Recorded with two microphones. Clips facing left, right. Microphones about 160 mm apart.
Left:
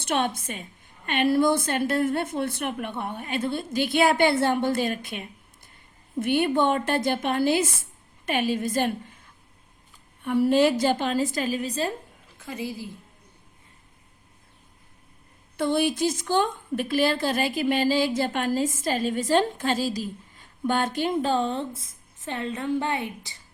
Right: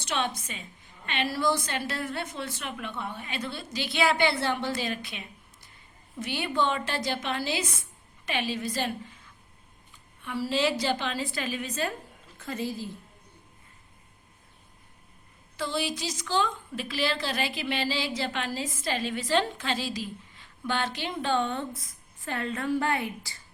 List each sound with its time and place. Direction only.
0.0 s a woman's voice: 50° left (ahead or behind)
10.2 s a woman's voice: 55° left (ahead or behind); by 11.9 s 35° left (ahead or behind)
12.4 s a woman's voice: 10° left (ahead or behind)
15.5 s a woman's voice: 55° left (ahead or behind); by 21.7 s 30° left (ahead or behind)
21.8 s a woman's voice: 20° left (ahead or behind)